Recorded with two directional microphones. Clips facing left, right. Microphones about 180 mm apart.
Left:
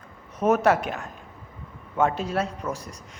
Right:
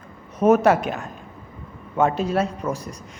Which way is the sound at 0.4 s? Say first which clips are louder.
Right 4 dB; 10° right (ahead or behind).